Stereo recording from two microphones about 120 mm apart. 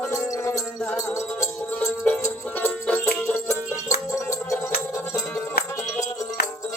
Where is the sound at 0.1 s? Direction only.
25° left (ahead or behind).